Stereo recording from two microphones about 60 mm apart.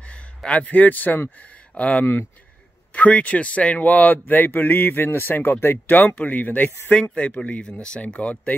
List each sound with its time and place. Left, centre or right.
0.0 s speech: left
7.0 s speech: centre